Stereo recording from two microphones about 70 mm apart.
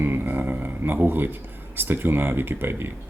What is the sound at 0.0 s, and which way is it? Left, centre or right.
Speech, right.